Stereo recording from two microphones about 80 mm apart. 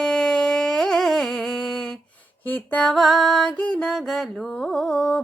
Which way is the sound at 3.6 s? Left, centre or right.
Centre.